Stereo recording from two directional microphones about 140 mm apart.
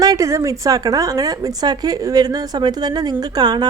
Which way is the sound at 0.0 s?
25° right (ahead or behind).